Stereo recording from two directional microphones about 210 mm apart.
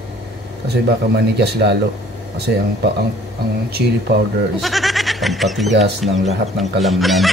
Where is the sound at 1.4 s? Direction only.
50° right (ahead or behind).